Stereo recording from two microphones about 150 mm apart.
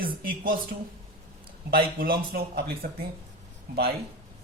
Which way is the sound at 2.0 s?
80° right.